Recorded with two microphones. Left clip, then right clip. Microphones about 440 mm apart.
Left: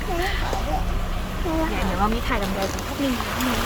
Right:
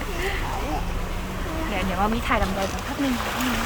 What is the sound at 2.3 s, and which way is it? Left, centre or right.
Speech, centre.